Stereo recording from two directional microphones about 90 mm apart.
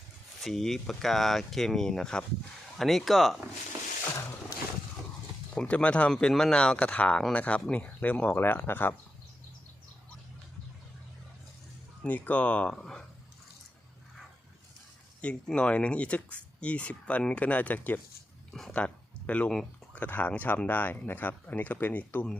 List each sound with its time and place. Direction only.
0.4 s speech: centre (ahead or behind)
4.0 s vehicle: 35° left (ahead or behind)
5.5 s speech: 15° left (ahead or behind)
12.0 s speech: 15° left (ahead or behind)
15.2 s speech: 10° left (ahead or behind)